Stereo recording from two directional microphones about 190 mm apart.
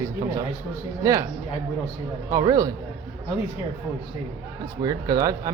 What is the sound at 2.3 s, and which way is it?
Speech, 20° right (ahead or behind).